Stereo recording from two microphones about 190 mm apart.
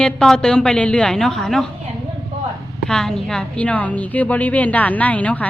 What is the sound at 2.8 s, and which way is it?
A woman's voice, centre (ahead or behind).